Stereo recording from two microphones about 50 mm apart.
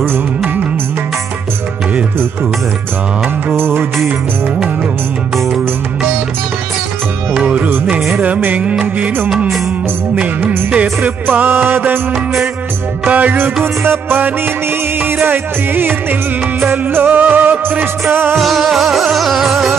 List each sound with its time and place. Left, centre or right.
3.5 s music: right
7.3 s music: right
10.7 s music: right
11.2 s music: right
13.0 s music: right
13.8 s music: right
15.2 s music: right
18.4 s music: centre